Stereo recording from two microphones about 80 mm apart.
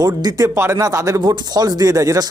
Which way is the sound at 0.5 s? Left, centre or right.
Right.